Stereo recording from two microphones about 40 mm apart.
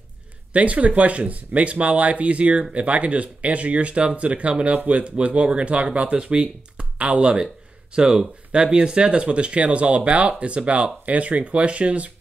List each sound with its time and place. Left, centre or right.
0.5 s speech: right
7.9 s speech: centre